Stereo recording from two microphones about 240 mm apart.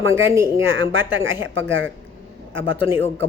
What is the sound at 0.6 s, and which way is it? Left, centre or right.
A woman's voice, right.